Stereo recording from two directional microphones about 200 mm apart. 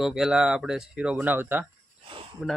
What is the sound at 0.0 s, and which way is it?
Speech, centre (ahead or behind).